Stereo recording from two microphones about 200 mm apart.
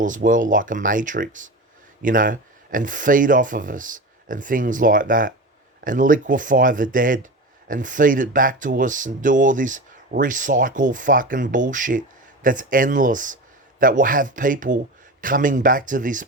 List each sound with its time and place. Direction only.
0.0 s speech: 40° right (ahead or behind)